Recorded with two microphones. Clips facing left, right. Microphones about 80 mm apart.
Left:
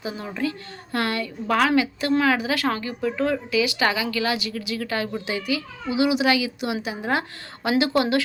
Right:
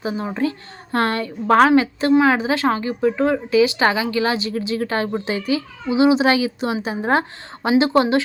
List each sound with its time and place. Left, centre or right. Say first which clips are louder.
0.0 s a woman's voice: right 5 dB; right